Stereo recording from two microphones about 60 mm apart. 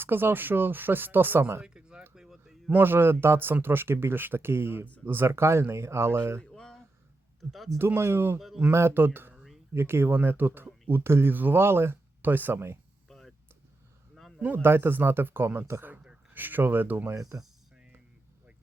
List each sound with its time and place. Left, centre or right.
0.0 s speech: right
1.6 s a sound: centre
2.7 s speech: right
6.5 s a sound: centre
7.5 s speech: centre
7.8 s speech: right
8.4 s speech: centre
8.7 s speech: right
9.3 s a sound: centre
9.7 s speech: right
13.1 s vehicle: centre
14.6 s speech: right
17.2 s speech: right